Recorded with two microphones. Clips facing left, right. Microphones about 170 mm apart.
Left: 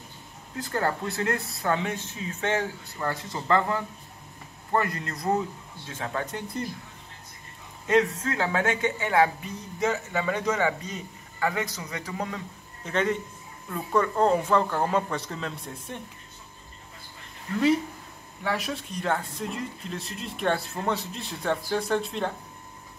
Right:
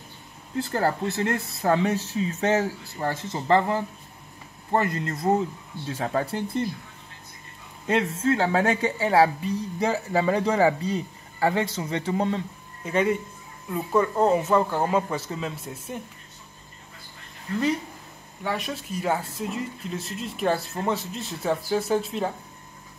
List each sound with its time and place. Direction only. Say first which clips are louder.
0.6 s speech: right 3 dB; 30° right (ahead or behind)
5.9 s speech: right 5 dB; 35° right (ahead or behind)
7.8 s speech: even; 30° right (ahead or behind)
12.8 s speech: right 3 dB; 10° right (ahead or behind)
18.4 s speech: even; centre (ahead or behind)